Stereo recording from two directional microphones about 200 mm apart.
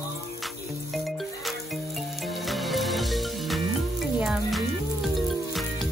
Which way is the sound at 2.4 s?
Centre (ahead or behind).